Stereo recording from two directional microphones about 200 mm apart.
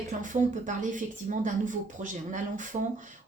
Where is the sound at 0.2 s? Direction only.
40° right (ahead or behind).